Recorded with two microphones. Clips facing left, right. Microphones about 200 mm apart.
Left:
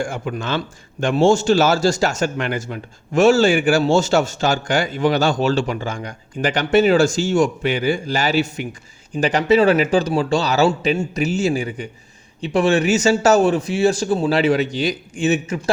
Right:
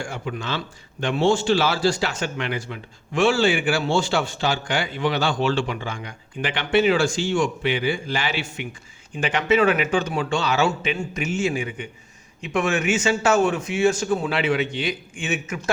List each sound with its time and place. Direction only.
0.0 s a man's voice: 50° left (ahead or behind); by 15.7 s 35° left (ahead or behind)